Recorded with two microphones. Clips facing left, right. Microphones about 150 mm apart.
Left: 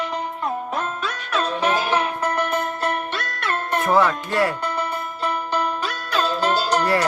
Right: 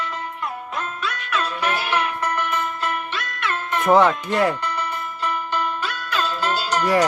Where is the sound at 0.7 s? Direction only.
40° left (ahead or behind).